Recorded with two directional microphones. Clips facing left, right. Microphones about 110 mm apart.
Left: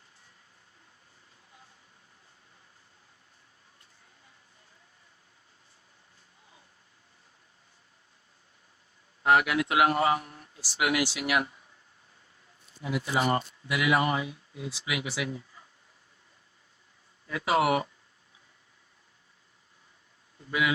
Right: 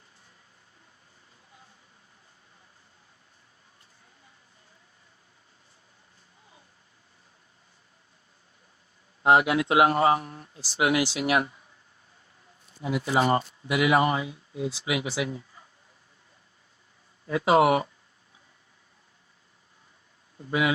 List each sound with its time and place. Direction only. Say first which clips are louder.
9.2 s speech: right 3 dB; 25° right (ahead or behind)
12.8 s speech: right 4 dB; 25° right (ahead or behind)
17.2 s speech: right 5 dB; 25° right (ahead or behind)
20.5 s speech: right 3 dB; 30° right (ahead or behind)